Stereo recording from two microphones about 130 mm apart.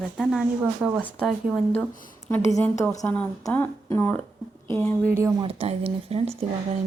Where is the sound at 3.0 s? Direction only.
10° left (ahead or behind).